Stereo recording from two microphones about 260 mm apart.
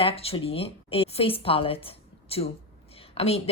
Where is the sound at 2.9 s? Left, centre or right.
Left.